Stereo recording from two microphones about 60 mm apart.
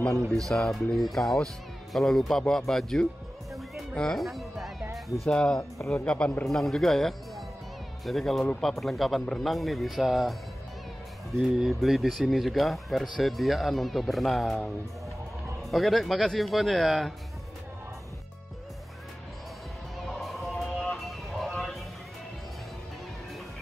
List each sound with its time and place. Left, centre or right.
0.5 s speech: centre
3.9 s music: centre
5.3 s speech: centre
6.4 s speech: centre
11.5 s speech: centre
15.7 s speech: centre
20.1 s music: centre
20.6 s music: centre
21.0 s vehicle: centre